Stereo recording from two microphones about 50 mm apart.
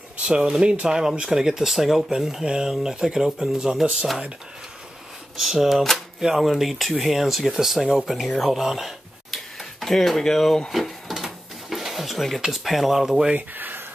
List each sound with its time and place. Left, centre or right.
0.2 s speech: centre
5.4 s speech: centre
10.7 s drawer open or close: centre
12.6 s speech: centre
13.6 s a sound: right